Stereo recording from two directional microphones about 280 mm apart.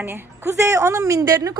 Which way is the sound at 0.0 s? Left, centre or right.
Centre.